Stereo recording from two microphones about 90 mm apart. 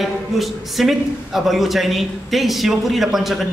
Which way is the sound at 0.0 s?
Centre (ahead or behind).